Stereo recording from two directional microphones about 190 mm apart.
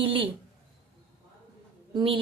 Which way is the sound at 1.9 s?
30° right (ahead or behind).